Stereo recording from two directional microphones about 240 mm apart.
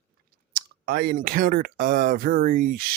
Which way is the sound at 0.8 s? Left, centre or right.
Right.